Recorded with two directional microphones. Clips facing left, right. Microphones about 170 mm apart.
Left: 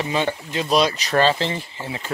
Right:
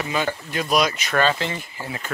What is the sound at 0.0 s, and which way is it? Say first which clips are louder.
Speech: left 2 dB; 25° left (ahead or behind).